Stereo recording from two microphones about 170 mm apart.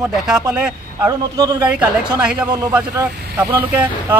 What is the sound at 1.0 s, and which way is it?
Speech, 20° right (ahead or behind).